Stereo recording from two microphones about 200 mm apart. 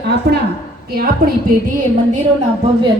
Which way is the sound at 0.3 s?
50° right (ahead or behind).